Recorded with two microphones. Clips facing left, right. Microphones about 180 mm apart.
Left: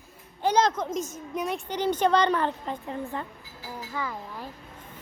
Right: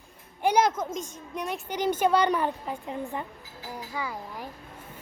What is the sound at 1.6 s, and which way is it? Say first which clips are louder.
A woman's voice: right 1 dB; 10° right (ahead or behind).